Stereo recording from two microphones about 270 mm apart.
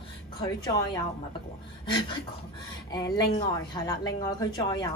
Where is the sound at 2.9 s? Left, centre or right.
Centre.